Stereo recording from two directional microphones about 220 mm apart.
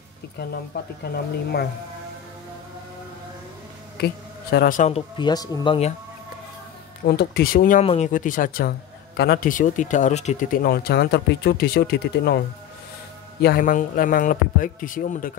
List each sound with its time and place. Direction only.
0.4 s speech: 50° left (ahead or behind)
4.0 s speech: 45° left (ahead or behind); by 5.9 s 25° left (ahead or behind)
7.1 s a man's voice: 45° left (ahead or behind)
7.8 s a man's voice: 30° left (ahead or behind); by 12.4 s 45° left (ahead or behind)
13.4 s a man's voice: 40° left (ahead or behind)